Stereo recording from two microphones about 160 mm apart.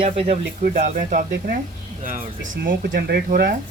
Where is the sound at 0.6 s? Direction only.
60° right (ahead or behind).